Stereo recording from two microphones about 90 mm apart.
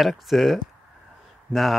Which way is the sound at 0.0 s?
Centre (ahead or behind).